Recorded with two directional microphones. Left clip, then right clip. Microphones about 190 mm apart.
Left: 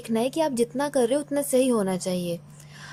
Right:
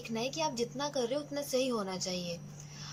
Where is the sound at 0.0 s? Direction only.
40° left (ahead or behind).